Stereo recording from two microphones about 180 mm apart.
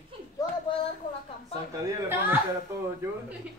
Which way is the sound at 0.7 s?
25° left (ahead or behind).